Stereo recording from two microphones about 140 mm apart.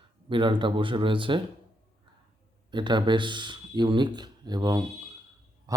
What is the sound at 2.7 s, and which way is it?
Speech, 35° right (ahead or behind).